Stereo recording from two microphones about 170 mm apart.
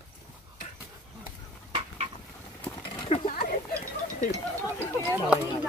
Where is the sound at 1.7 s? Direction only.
35° right (ahead or behind).